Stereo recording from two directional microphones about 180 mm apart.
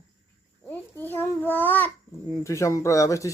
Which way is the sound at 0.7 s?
10° left (ahead or behind).